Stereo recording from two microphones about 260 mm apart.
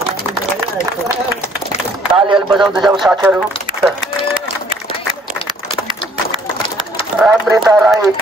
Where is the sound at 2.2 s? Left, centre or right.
Centre.